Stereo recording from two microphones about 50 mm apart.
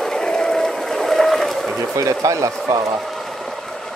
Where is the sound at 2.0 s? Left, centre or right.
Right.